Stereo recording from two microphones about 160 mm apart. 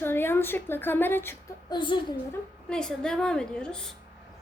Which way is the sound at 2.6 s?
5° left (ahead or behind).